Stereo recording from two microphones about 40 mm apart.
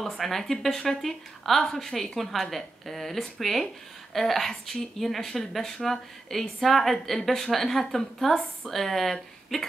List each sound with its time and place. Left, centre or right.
0.2 s a woman's voice: centre